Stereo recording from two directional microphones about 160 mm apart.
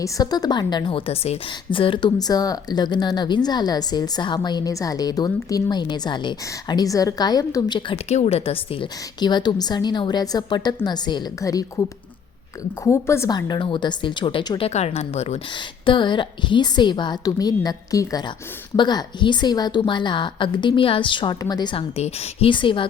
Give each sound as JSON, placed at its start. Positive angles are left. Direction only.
{"t": 0.0, "sound": "a woman's voice", "side_deg": 20}
{"t": 8.1, "sound": "a woman's voice", "side_deg": 40}
{"t": 14.7, "sound": "speech", "side_deg": 40}
{"t": 15.9, "sound": "a woman's voice", "side_deg": 30}